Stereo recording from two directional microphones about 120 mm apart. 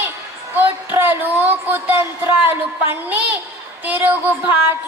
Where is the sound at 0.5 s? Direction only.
15° right (ahead or behind).